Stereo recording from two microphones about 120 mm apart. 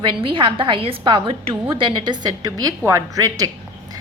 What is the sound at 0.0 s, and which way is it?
A woman's voice, 45° right (ahead or behind).